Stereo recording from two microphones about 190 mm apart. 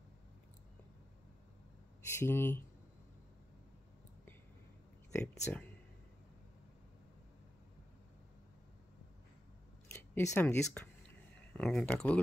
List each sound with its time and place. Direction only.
2.0 s speech: 15° left (ahead or behind)
5.1 s a sound: 5° left (ahead or behind)
10.1 s speech: 10° left (ahead or behind)